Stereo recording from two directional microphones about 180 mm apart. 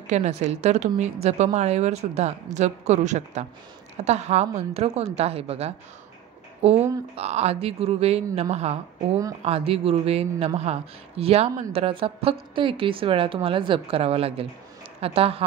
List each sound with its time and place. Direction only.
0.0 s a woman's voice: 40° right (ahead or behind)